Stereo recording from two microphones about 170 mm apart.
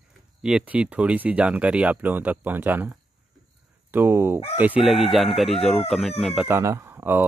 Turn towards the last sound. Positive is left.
turn(degrees=-10)  # may be behind; listen again after turning